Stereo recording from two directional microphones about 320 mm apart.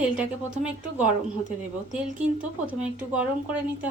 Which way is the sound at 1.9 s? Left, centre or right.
Centre.